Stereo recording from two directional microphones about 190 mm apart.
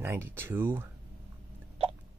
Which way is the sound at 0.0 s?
10° right (ahead or behind).